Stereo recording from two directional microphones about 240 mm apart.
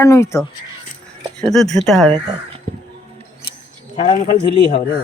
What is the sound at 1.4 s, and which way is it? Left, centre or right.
Speech, centre.